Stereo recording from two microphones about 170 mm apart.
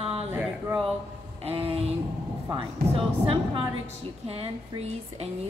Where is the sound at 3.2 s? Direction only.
30° right (ahead or behind).